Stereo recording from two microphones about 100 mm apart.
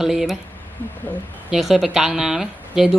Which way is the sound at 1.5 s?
5° right (ahead or behind).